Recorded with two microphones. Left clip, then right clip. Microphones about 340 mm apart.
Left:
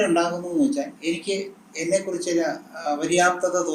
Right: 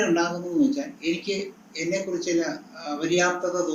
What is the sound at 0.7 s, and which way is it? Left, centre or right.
Speech, left.